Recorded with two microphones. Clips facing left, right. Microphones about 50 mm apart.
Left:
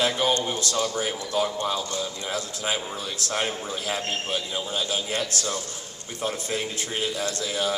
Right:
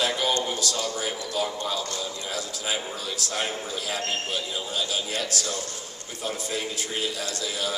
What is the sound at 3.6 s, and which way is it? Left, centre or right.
A man's voice, left.